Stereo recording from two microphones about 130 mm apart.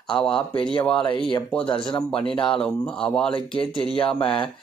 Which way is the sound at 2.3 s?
40° left (ahead or behind).